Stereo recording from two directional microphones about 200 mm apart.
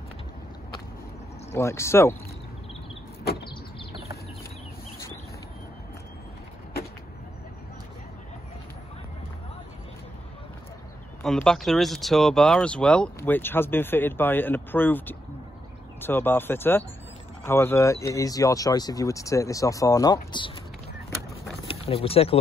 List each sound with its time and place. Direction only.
1.5 s speech: 15° left (ahead or behind)
11.2 s speech: centre (ahead or behind); by 20.5 s 20° left (ahead or behind)
21.6 s speech: 30° left (ahead or behind)